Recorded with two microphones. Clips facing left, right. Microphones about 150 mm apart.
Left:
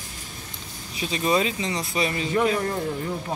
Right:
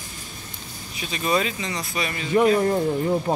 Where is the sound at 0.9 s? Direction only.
25° left (ahead or behind).